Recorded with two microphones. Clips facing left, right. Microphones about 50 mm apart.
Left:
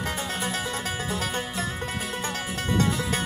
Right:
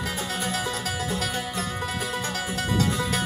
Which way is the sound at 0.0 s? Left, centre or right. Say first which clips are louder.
Even; left.